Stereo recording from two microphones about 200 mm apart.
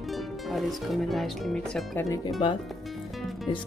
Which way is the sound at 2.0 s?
15° left (ahead or behind).